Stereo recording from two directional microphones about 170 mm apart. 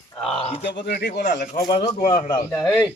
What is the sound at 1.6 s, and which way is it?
Speech, 30° left (ahead or behind).